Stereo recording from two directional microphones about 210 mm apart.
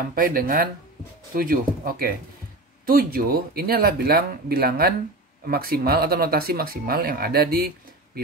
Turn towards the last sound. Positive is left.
turn(degrees=-45)  # may be behind; listen again after turning